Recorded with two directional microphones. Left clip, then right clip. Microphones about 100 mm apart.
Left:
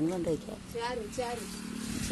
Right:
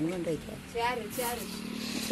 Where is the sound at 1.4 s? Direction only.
55° left (ahead or behind).